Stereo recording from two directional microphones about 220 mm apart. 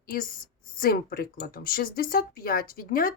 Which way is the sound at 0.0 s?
40° left (ahead or behind).